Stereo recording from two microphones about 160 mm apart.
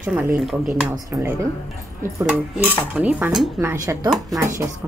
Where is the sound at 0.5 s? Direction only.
5° right (ahead or behind).